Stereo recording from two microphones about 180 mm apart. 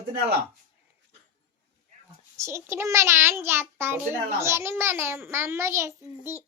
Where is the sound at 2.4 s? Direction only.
15° right (ahead or behind).